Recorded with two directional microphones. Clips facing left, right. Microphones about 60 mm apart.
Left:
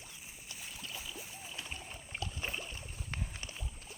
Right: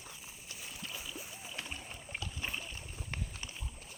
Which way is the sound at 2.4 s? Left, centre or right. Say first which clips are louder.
Even; centre.